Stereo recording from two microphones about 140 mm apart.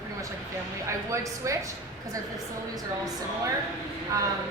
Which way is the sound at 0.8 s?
20° right (ahead or behind).